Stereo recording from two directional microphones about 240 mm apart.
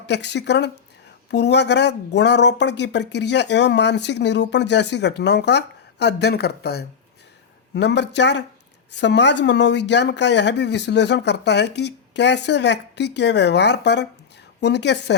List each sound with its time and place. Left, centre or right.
0.1 s speech: left